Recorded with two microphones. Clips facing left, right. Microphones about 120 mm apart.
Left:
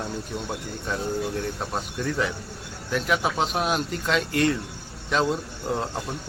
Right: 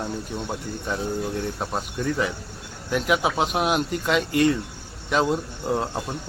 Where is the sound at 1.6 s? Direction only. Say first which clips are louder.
Right 2 dB; 10° right (ahead or behind).